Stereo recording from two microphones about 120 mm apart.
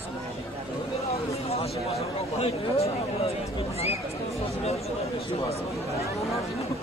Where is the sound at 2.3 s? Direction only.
55° left (ahead or behind).